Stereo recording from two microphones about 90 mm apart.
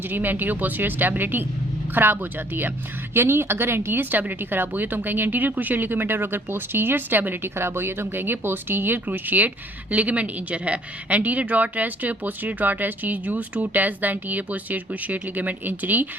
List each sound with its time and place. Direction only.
0.1 s speech: 20° right (ahead or behind)
3.2 s speech: 25° right (ahead or behind)